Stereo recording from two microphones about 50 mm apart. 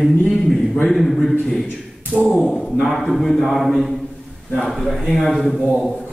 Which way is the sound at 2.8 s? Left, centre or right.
Centre.